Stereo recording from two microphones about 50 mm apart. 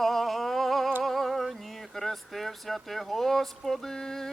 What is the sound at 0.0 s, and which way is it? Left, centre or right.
Humming, centre.